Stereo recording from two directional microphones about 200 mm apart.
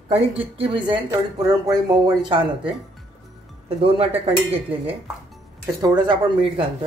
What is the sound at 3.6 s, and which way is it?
Speech, 30° right (ahead or behind).